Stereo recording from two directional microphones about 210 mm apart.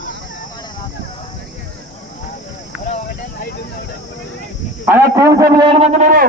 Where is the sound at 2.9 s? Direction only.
40° left (ahead or behind).